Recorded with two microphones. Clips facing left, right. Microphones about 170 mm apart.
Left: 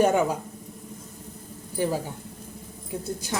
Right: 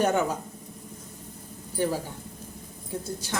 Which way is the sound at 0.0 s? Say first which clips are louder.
Left 3 dB; 10° left (ahead or behind).